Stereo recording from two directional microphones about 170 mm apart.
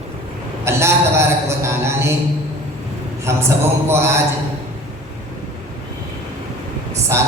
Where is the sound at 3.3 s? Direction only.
15° right (ahead or behind).